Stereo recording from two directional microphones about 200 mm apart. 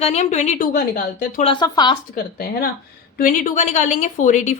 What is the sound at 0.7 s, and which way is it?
Speech, 45° left (ahead or behind).